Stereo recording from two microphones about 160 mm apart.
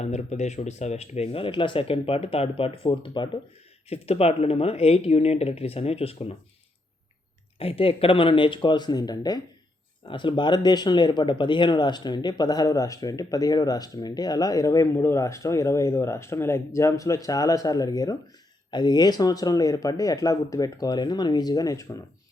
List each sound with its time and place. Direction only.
0.0 s speech: 45° left (ahead or behind)
7.6 s speech: 35° left (ahead or behind)